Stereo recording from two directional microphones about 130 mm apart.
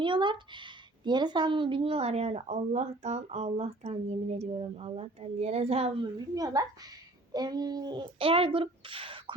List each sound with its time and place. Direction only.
0.0 s speech: 40° right (ahead or behind)
6.0 s a woman's voice: 30° right (ahead or behind)